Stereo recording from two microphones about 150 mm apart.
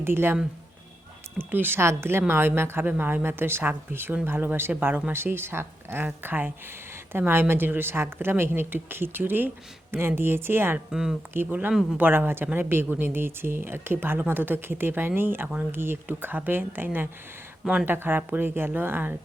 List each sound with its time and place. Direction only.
0.0 s a woman's voice: 15° right (ahead or behind)
1.4 s a woman's voice: 15° right (ahead or behind)
10.9 s a woman's voice: 5° right (ahead or behind)